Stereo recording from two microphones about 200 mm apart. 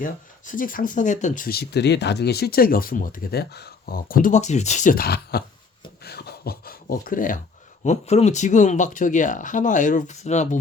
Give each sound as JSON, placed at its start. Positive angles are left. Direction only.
{"t": 0.0, "sound": "speech", "side_deg": 45}
{"t": 6.1, "sound": "a sound", "side_deg": 50}
{"t": 7.9, "sound": "speech", "side_deg": 35}